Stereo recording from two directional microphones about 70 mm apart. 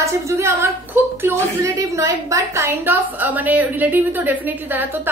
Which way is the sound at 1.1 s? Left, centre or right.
Right.